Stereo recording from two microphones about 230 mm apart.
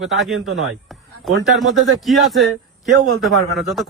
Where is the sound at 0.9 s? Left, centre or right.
Centre.